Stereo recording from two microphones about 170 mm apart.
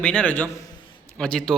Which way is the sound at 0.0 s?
5° left (ahead or behind).